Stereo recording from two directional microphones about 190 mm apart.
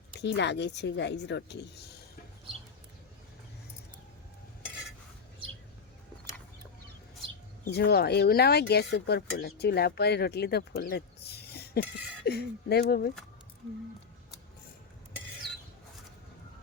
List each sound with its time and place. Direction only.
0.2 s speech: 65° left (ahead or behind)
7.6 s speech: 55° left (ahead or behind)